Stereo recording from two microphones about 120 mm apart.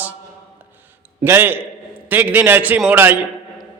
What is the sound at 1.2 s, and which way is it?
A man's voice, 20° right (ahead or behind).